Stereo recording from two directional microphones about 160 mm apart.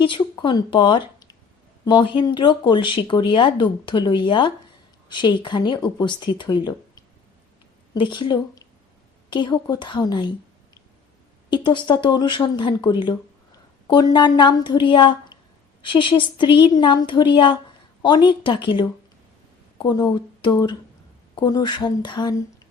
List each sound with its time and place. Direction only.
0.0 s speech: 30° left (ahead or behind)
11.5 s speech: 30° left (ahead or behind)